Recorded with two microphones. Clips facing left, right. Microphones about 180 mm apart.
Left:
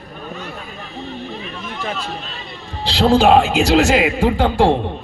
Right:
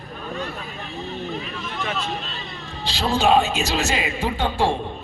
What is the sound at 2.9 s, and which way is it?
A man's voice, 65° left (ahead or behind).